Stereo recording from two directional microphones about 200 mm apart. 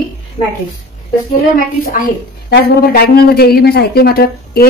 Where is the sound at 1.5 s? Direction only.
45° left (ahead or behind).